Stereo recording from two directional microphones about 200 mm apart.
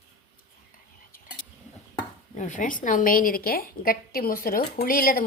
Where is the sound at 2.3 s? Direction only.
40° left (ahead or behind).